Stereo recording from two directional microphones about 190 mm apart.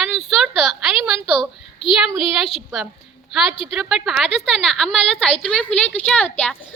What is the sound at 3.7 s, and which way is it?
A child's voice, centre (ahead or behind).